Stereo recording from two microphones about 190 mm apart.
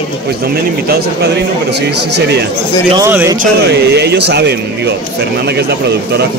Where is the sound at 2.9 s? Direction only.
15° right (ahead or behind).